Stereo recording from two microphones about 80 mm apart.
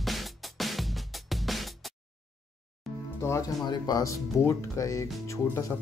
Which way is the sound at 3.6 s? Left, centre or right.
Left.